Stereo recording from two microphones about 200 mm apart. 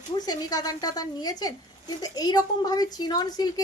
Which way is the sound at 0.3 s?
20° left (ahead or behind).